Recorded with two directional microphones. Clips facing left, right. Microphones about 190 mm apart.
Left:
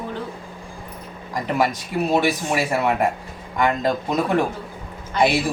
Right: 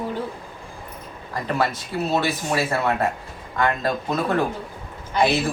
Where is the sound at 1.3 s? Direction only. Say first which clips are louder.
Left 2 dB; 15° left (ahead or behind).